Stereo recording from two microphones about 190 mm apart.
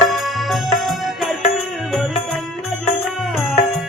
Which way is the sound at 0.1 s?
Centre (ahead or behind).